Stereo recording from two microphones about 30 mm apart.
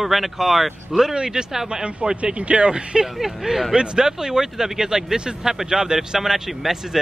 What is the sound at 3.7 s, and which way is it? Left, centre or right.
Speech, right.